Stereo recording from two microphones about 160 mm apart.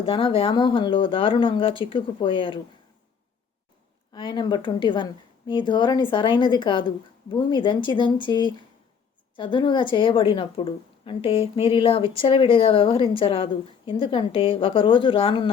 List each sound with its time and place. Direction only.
0.0 s speech: 35° left (ahead or behind)
4.1 s speech: 30° left (ahead or behind)